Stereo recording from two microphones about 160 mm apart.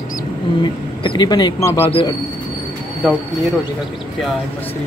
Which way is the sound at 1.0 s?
30° left (ahead or behind).